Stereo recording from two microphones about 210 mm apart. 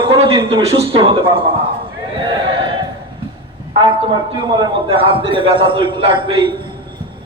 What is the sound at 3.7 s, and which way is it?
A man's voice, 25° right (ahead or behind).